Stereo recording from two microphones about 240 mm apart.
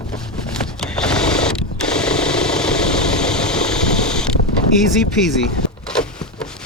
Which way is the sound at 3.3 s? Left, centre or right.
Centre.